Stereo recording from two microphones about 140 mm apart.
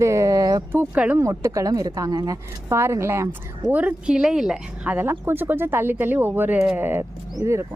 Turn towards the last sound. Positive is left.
turn(degrees=-20)  # may be behind; listen again after turning